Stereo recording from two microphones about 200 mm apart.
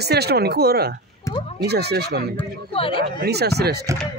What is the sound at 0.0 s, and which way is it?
Speech, 55° right (ahead or behind).